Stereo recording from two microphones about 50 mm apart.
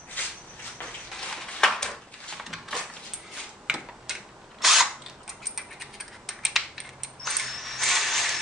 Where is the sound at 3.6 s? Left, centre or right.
Centre.